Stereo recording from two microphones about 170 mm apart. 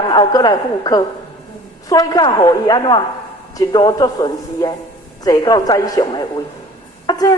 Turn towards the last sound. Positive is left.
turn(degrees=20)  # may be behind; listen again after turning